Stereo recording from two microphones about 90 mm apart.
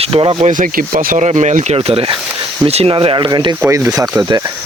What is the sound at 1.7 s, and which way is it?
Speech, 90° right.